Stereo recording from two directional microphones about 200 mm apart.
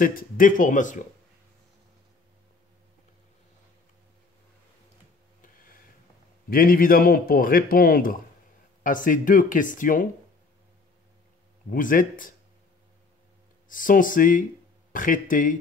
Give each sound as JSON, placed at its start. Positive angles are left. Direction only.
{"t": 0.0, "sound": "speech", "side_deg": 45}
{"t": 6.5, "sound": "speech", "side_deg": 45}
{"t": 11.7, "sound": "speech", "side_deg": 40}
{"t": 13.7, "sound": "speech", "side_deg": 40}